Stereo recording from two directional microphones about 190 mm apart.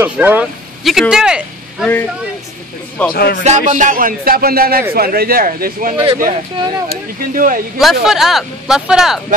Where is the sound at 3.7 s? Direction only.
40° right (ahead or behind).